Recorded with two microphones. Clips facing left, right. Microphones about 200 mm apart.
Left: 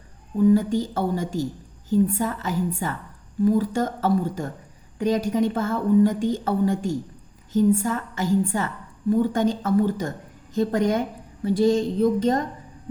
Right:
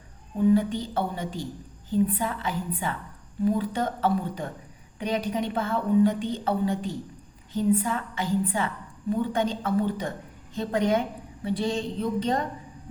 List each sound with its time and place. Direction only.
0.5 s a woman's voice: 45° left (ahead or behind)